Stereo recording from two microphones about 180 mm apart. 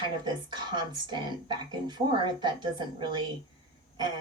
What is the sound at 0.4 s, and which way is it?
A woman's voice, 25° right (ahead or behind).